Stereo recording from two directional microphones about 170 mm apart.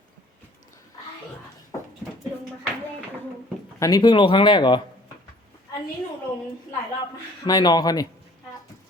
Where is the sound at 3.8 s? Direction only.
25° left (ahead or behind).